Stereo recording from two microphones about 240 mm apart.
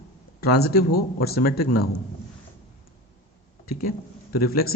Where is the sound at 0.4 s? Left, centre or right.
Left.